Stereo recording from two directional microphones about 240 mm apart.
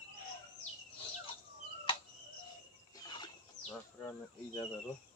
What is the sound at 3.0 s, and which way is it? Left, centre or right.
Bird, centre.